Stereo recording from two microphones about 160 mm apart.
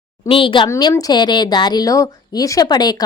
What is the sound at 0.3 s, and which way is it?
A woman's voice, 30° left (ahead or behind).